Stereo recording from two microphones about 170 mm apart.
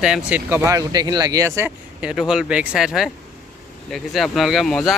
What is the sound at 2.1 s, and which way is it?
Speech, centre (ahead or behind).